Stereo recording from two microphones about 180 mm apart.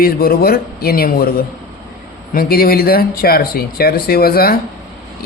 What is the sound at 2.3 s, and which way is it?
Speech, 55° left (ahead or behind).